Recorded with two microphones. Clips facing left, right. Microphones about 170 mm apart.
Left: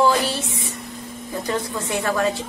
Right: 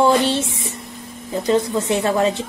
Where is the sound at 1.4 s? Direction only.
20° right (ahead or behind).